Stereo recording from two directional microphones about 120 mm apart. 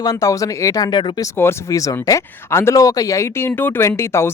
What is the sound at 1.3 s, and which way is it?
Speech, 25° left (ahead or behind).